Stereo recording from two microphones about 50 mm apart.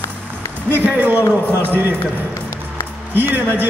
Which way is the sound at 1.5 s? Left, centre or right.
Right.